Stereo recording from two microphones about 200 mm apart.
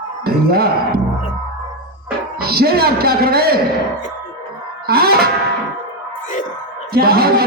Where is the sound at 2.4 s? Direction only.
50° right (ahead or behind).